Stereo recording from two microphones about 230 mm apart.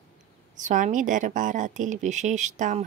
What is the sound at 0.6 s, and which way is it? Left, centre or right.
Speech, right.